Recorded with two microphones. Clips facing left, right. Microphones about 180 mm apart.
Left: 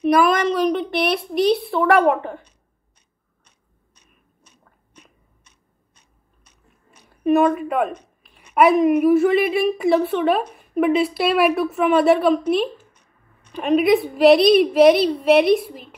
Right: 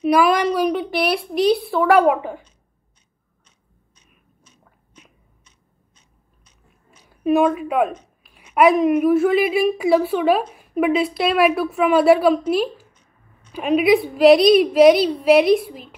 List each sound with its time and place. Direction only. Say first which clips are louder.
0.0 s speech: even; 5° right (ahead or behind)
4.6 s biting: even; 5° right (ahead or behind)
5.9 s biting: left 1 dB; 65° left (ahead or behind)
7.1 s a woman's voice: even; centre (ahead or behind)
12.9 s a sound: right 1 dB; 65° left (ahead or behind)
13.5 s a woman's voice: even; 5° right (ahead or behind)